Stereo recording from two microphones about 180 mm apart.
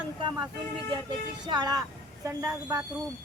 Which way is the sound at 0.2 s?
25° right (ahead or behind).